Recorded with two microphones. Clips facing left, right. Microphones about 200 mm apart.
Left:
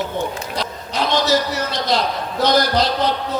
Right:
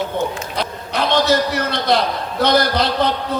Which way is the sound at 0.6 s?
60° right (ahead or behind).